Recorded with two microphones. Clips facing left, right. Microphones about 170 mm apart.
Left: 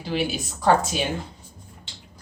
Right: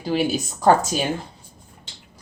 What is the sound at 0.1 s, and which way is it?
Speech, 40° right (ahead or behind).